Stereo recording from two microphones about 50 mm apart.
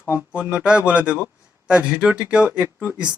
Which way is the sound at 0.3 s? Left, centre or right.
Right.